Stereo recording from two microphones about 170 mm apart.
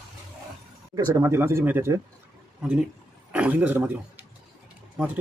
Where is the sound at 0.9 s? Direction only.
15° right (ahead or behind).